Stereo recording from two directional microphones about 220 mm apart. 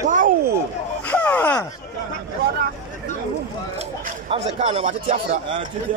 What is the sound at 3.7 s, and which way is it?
A man's voice, 30° right (ahead or behind).